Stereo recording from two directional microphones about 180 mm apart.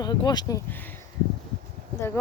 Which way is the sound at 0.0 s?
20° left (ahead or behind).